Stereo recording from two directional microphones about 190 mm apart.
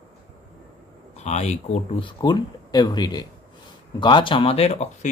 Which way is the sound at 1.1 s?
35° left (ahead or behind).